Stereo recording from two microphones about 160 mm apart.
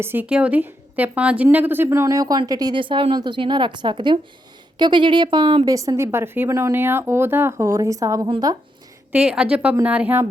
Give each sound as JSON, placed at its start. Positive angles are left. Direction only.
{"t": 0.0, "sound": "a woman's voice", "side_deg": -10}
{"t": 9.1, "sound": "speech", "side_deg": -5}